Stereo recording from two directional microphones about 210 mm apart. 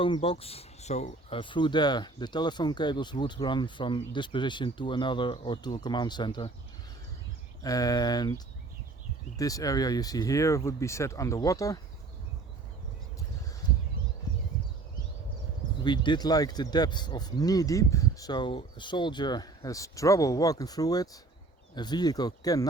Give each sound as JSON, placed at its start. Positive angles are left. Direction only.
{"t": 0.0, "sound": "speech", "side_deg": 25}
{"t": 7.6, "sound": "speech", "side_deg": 15}
{"t": 9.4, "sound": "speech", "side_deg": 15}
{"t": 13.6, "sound": "a sound", "side_deg": 20}
{"t": 15.8, "sound": "speech", "side_deg": 20}